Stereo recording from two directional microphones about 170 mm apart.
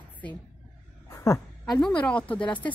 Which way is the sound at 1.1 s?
15° left (ahead or behind).